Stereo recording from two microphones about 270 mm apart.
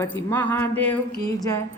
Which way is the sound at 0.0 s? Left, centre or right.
Centre.